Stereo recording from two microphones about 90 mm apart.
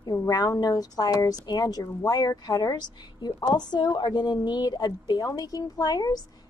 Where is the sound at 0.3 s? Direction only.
45° left (ahead or behind).